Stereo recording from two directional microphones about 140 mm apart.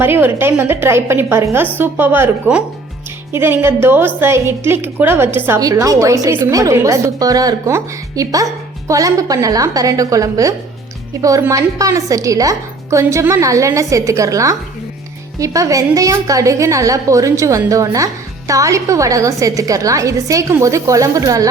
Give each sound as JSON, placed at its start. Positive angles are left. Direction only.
{"t": 0.0, "sound": "a woman's voice", "side_deg": -15}